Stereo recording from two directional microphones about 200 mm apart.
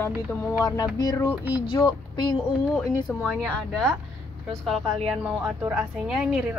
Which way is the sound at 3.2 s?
5° left (ahead or behind).